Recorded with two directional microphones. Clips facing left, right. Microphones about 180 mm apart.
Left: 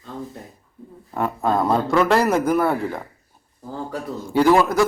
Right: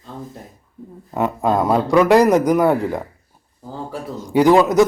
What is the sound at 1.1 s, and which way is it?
Speech, 10° right (ahead or behind).